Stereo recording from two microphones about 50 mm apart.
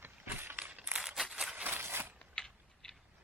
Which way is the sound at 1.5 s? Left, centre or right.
Right.